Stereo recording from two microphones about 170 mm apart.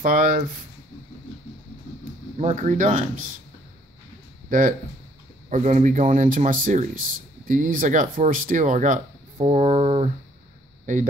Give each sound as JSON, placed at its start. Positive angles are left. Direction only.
{"t": 0.0, "sound": "speech", "side_deg": -50}
{"t": 2.3, "sound": "speech", "side_deg": -45}
{"t": 4.5, "sound": "speech", "side_deg": -50}